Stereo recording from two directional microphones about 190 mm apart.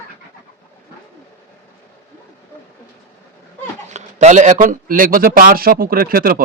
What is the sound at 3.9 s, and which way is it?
Speech, 35° right (ahead or behind).